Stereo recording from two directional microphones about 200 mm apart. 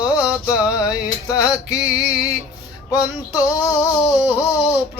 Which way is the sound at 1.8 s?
5° right (ahead or behind).